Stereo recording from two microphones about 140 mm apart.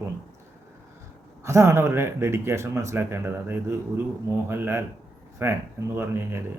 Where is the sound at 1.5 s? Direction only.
20° right (ahead or behind).